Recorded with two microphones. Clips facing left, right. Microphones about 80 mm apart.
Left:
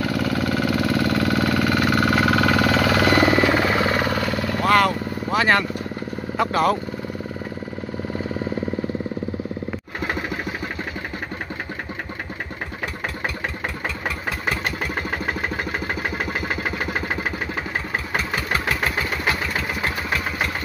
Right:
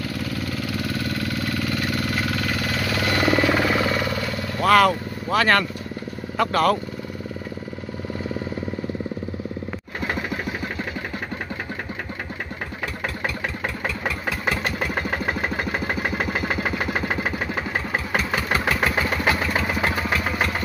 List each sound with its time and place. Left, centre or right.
0.0 s engine: left
3.3 s helicopter: centre
3.8 s vehicle: left
4.6 s vehicle: centre
6.3 s speech: centre